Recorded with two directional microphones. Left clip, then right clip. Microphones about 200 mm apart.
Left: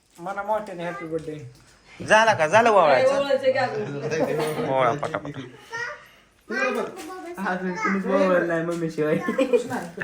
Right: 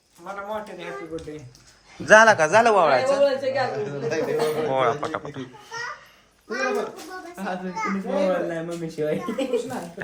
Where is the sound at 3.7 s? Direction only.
50° right (ahead or behind).